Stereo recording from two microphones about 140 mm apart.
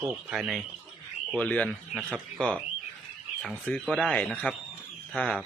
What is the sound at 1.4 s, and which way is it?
Speech, 10° left (ahead or behind).